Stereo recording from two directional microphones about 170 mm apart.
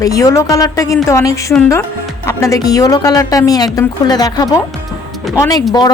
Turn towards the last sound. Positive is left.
turn(degrees=25)  # may be behind; listen again after turning